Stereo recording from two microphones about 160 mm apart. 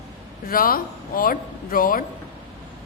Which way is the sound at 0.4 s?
65° left (ahead or behind).